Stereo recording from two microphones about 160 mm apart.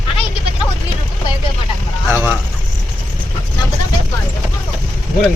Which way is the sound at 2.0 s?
15° right (ahead or behind).